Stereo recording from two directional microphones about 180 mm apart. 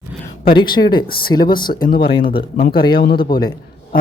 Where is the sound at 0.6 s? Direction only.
25° left (ahead or behind).